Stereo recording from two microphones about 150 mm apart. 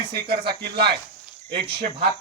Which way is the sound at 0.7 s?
90° right.